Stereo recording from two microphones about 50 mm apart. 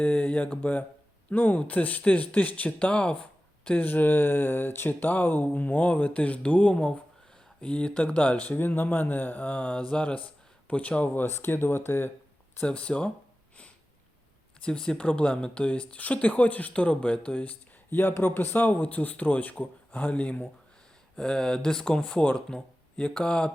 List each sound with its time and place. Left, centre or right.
0.0 s speech: left
2.8 s a sound: left
3.8 s speech: left
11.3 s speech: left
12.6 s speech: left
14.6 s speech: centre
18.2 s speech: left
21.2 s speech: centre